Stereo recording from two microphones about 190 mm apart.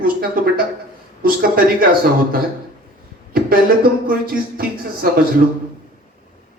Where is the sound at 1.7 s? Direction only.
50° right (ahead or behind).